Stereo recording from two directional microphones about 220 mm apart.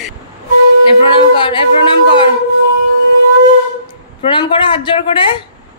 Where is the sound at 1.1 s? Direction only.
20° left (ahead or behind).